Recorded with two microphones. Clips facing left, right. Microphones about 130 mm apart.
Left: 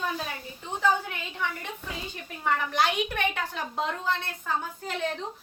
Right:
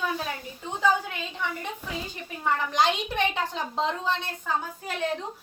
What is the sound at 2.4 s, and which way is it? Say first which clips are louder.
A woman's voice: right 2 dB; 20° right (ahead or behind).